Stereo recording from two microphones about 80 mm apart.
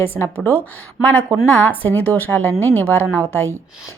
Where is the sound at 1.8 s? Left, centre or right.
Centre.